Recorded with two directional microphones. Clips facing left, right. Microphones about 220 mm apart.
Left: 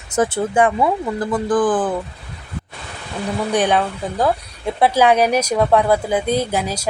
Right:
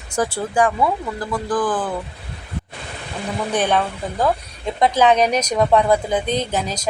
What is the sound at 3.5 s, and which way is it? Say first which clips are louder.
A woman's voice: left 2 dB; 15° left (ahead or behind).